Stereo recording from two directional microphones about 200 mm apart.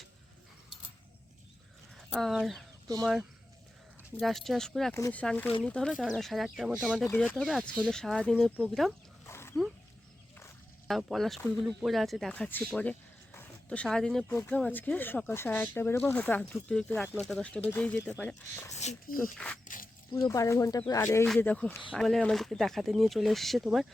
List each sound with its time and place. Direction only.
2.0 s a sound: centre (ahead or behind)
3.0 s speech: centre (ahead or behind)
9.2 s wild animals: 10° left (ahead or behind)
10.8 s speech: centre (ahead or behind)
18.7 s speech: 35° left (ahead or behind)
19.2 s speech: 5° left (ahead or behind)
19.6 s zipper: 45° left (ahead or behind)
20.2 s speech: 15° left (ahead or behind); by 23.8 s centre (ahead or behind)